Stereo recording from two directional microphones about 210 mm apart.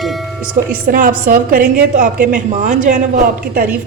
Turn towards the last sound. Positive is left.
turn(degrees=-40)  # may be behind; listen again after turning